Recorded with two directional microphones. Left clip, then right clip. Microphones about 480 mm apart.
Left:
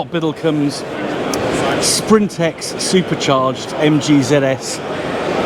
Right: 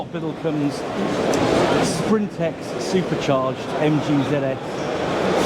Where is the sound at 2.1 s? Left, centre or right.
Centre.